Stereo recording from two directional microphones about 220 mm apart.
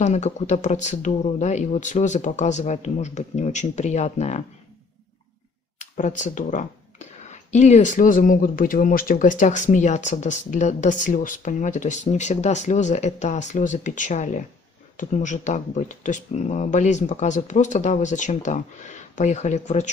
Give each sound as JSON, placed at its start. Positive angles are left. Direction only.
{"t": 0.0, "sound": "speech", "side_deg": 30}
{"t": 5.8, "sound": "speech", "side_deg": 35}